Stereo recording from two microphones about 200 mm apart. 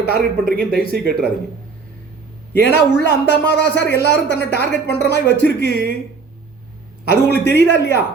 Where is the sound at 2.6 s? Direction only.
60° left (ahead or behind).